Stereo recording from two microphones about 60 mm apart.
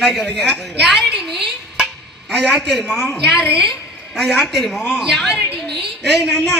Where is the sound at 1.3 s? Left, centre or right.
Centre.